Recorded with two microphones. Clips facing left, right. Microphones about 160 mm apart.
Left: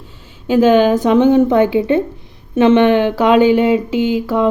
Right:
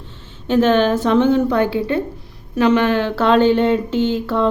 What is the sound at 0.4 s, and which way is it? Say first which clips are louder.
A woman's voice: left 4 dB; 10° left (ahead or behind).